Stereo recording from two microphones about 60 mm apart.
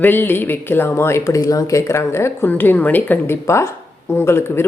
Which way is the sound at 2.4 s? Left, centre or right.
Left.